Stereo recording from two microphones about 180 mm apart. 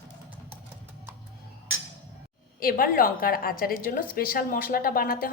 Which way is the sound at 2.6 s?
55° left (ahead or behind).